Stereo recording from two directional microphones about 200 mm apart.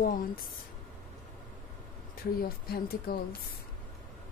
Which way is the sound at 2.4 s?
50° left (ahead or behind).